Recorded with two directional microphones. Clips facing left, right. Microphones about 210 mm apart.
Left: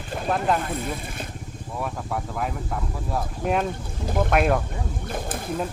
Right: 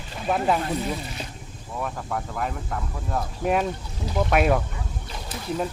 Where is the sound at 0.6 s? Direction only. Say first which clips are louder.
Right 2 dB; 50° left (ahead or behind).